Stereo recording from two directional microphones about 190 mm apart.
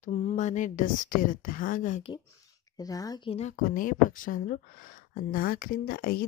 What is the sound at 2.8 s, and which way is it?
Speech, 20° left (ahead or behind).